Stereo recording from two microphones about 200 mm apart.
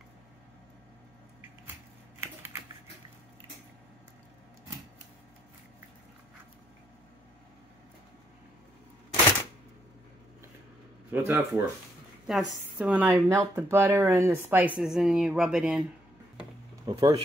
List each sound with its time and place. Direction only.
11.1 s speech: 10° right (ahead or behind)
16.8 s speech: 25° right (ahead or behind)